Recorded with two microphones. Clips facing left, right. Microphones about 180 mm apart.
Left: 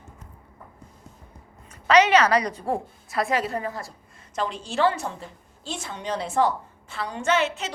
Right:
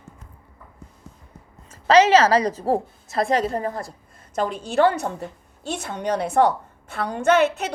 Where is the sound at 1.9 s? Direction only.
30° right (ahead or behind).